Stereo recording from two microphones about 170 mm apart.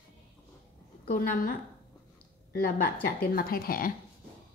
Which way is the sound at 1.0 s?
55° left (ahead or behind).